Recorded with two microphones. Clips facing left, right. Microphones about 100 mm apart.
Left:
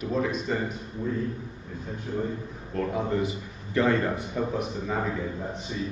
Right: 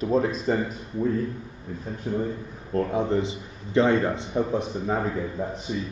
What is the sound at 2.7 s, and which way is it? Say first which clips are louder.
A man's voice: right 4 dB; 25° right (ahead or behind).